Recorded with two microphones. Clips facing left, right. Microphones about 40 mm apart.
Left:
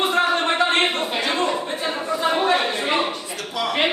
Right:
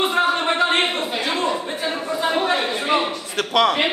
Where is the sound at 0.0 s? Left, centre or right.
Centre.